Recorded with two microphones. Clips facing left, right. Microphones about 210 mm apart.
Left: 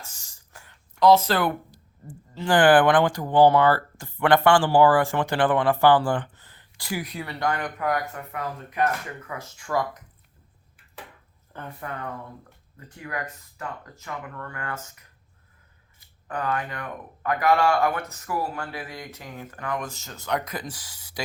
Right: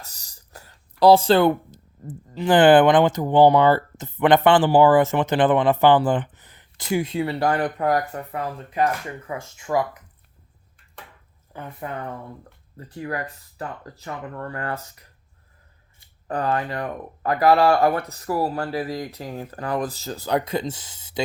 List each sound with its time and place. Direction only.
0.0 s speech: 35° right (ahead or behind); by 9.8 s 20° right (ahead or behind)
11.5 s speech: 10° right (ahead or behind)
12.7 s speech: 35° right (ahead or behind)